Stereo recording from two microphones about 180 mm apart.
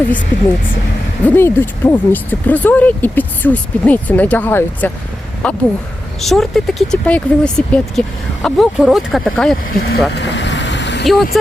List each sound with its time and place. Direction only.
0.3 s speech: 10° left (ahead or behind)
9.7 s speech: 60° left (ahead or behind)
10.2 s vehicle: 80° left
11.0 s speech: centre (ahead or behind)